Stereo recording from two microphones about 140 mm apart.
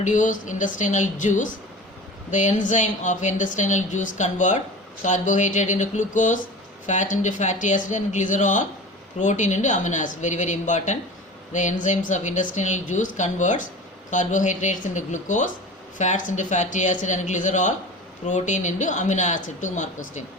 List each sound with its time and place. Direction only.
0.0 s speech: 65° left (ahead or behind)